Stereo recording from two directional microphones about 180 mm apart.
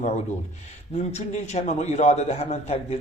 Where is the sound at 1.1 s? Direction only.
40° left (ahead or behind).